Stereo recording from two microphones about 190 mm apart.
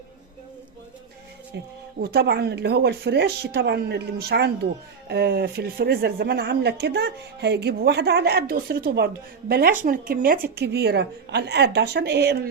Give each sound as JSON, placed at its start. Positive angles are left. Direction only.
{"t": 1.5, "sound": "speech", "side_deg": -65}
{"t": 10.5, "sound": "speech", "side_deg": -60}